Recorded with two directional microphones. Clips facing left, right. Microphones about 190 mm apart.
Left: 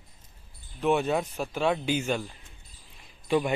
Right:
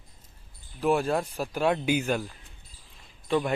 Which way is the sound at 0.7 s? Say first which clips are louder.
Even; 5° right (ahead or behind).